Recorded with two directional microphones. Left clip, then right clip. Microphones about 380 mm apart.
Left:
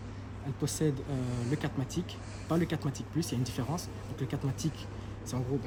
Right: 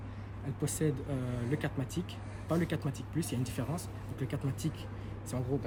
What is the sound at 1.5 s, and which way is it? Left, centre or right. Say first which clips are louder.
Speech: left 1 dB; centre.